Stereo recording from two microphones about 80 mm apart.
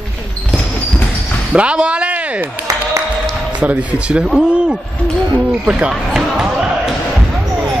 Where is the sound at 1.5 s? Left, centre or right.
Centre.